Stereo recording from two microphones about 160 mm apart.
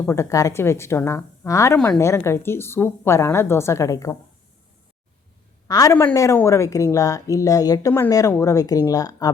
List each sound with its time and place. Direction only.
0.0 s speech: 15° left (ahead or behind)
5.6 s speech: 20° left (ahead or behind)